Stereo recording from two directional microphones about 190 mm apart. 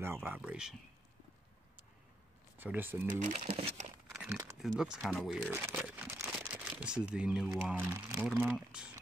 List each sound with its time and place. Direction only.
0.0 s speech: 10° right (ahead or behind)
2.5 s speech: 10° right (ahead or behind)
3.1 s speech: 40° right (ahead or behind)
4.1 s crumpling: 5° right (ahead or behind)
4.6 s speech: centre (ahead or behind)